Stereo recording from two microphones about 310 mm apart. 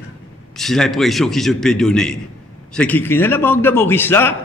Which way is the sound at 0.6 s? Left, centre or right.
Centre.